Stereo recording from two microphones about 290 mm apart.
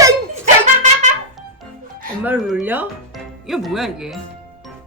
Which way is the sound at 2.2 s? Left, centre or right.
Centre.